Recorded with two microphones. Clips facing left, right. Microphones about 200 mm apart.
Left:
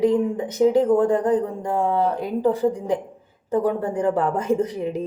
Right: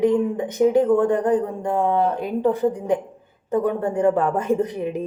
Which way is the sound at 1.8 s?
25° right (ahead or behind).